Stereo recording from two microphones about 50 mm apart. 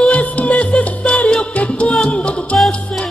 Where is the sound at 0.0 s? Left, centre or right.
Left.